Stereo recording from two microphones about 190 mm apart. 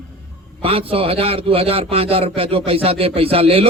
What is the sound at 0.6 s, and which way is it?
A man's voice, 30° right (ahead or behind).